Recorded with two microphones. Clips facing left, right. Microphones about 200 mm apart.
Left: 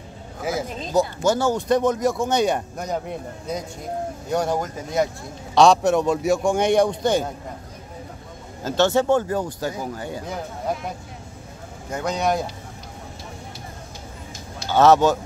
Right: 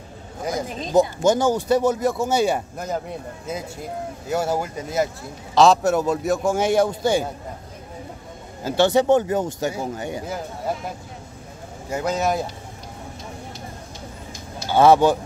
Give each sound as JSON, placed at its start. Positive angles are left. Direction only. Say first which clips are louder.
{"t": 0.4, "sound": "a sound", "louder": "even", "side_deg": 5}
{"t": 0.9, "sound": "speech", "louder": "right 3 dB", "side_deg": -20}
{"t": 1.7, "sound": "a man's voice", "louder": "even", "side_deg": -5}
{"t": 8.6, "sound": "speech", "louder": "right 2 dB", "side_deg": -15}
{"t": 11.9, "sound": "a man's voice", "louder": "right 1 dB", "side_deg": -5}
{"t": 14.7, "sound": "speech", "louder": "right 1 dB", "side_deg": -10}